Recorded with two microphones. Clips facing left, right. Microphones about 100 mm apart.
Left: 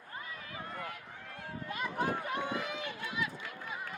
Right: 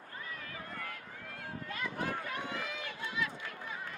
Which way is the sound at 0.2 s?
20° left (ahead or behind).